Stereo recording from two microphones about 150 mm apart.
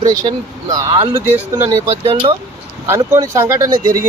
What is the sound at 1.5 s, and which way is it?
Speech, 25° right (ahead or behind).